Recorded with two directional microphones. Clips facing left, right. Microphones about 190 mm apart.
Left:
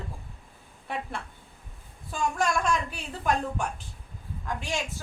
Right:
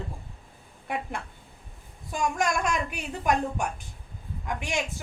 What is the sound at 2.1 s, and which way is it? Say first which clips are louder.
A woman's voice: even; 15° right (ahead or behind).